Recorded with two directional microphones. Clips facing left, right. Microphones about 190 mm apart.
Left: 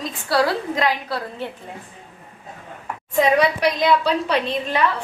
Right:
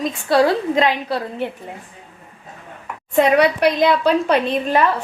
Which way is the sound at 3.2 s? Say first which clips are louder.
Right 3 dB; 60° right (ahead or behind).